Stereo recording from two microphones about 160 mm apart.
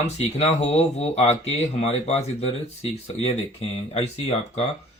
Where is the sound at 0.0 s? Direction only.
40° left (ahead or behind).